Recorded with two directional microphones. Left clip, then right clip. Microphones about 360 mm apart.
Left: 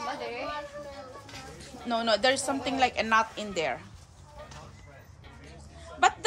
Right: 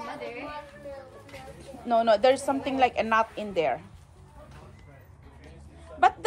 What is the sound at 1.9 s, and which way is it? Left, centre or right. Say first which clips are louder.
A woman's voice: right 4 dB; centre.